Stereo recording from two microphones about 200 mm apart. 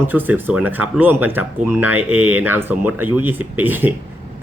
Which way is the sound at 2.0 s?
90° right.